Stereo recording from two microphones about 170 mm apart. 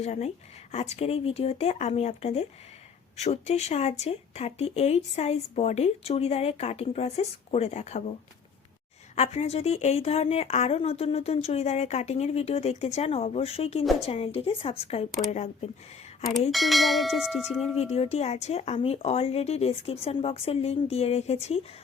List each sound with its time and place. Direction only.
0.0 s speech: 40° left (ahead or behind)
9.1 s speech: 40° left (ahead or behind)
16.5 s bell: centre (ahead or behind)
17.7 s speech: 35° left (ahead or behind)